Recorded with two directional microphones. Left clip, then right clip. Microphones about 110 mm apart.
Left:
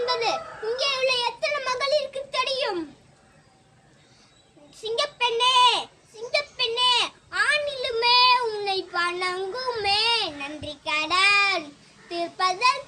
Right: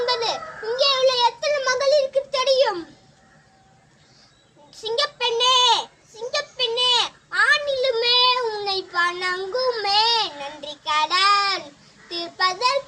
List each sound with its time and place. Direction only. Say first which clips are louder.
0.0 s children playing: right 2 dB; 30° left (ahead or behind)
0.8 s child singing: right 7 dB; 25° left (ahead or behind)
4.8 s a sound: right 2 dB; 20° left (ahead or behind)
12.0 s child singing: right 2 dB; 25° left (ahead or behind)